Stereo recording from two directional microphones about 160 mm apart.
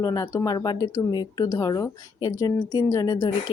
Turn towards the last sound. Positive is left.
turn(degrees=20)  # may be behind; listen again after turning